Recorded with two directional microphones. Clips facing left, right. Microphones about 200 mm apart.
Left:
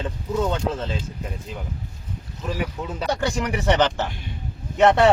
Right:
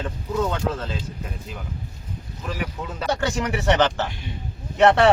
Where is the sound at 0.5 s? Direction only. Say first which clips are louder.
Left 1 dB; 25° left (ahead or behind).